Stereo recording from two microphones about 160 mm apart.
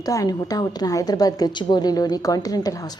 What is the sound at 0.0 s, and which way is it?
A woman's voice, 20° left (ahead or behind).